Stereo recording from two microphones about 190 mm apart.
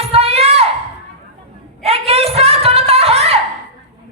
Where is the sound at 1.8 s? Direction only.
30° right (ahead or behind).